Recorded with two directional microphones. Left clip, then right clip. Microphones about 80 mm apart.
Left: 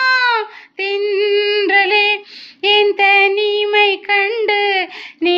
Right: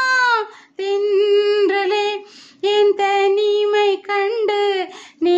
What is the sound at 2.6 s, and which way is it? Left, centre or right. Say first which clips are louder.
Child singing: left 4 dB; right.